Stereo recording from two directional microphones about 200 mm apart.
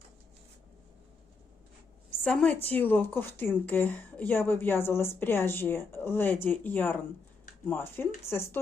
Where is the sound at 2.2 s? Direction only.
5° left (ahead or behind).